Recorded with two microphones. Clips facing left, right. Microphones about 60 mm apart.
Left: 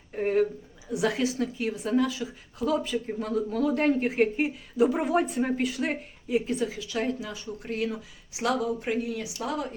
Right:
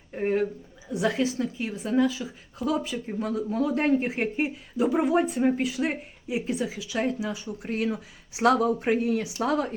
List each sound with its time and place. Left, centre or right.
0.2 s speech: centre
1.0 s a woman's voice: centre
1.5 s speech: centre
2.0 s speech: centre; by 9.6 s right